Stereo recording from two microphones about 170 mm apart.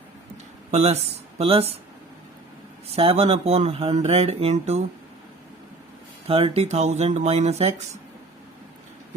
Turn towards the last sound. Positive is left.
turn(degrees=-40)  # may be behind; listen again after turning